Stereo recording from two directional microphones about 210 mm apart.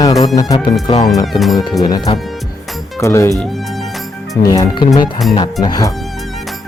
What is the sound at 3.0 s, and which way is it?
Speech, 15° left (ahead or behind).